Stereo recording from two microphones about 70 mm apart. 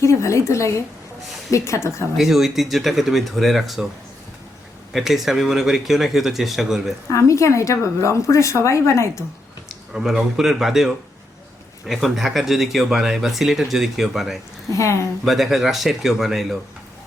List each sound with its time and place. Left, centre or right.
0.0 s a woman's voice: left
2.1 s speech: centre
4.9 s speech: centre
7.1 s a woman's voice: left
9.9 s speech: centre
14.7 s a woman's voice: left
15.2 s speech: centre